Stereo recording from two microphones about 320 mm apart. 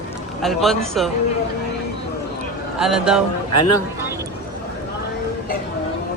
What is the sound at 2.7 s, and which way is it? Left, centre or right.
Speech, centre.